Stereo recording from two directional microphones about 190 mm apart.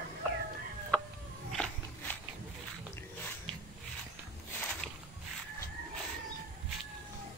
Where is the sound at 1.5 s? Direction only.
10° left (ahead or behind).